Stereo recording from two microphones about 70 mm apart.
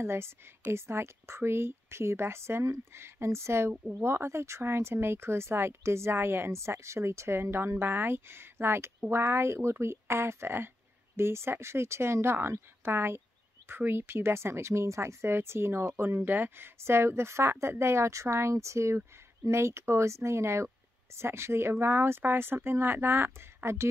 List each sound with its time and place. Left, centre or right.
0.0 s speech: right